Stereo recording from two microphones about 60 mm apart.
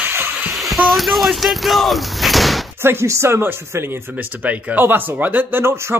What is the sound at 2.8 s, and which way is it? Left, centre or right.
Speech, right.